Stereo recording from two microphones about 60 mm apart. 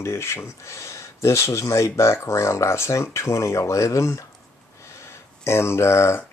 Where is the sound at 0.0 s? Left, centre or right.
Left.